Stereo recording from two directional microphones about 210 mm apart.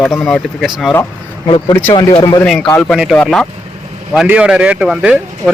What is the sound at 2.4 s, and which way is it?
Speech, centre (ahead or behind).